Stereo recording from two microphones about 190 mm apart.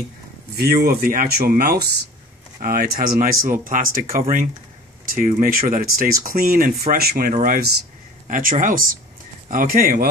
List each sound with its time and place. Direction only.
0.6 s speech: 55° right (ahead or behind)